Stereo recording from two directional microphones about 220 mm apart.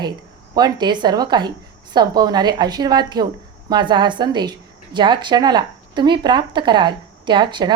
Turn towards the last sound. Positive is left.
turn(degrees=-20)  # may be behind; listen again after turning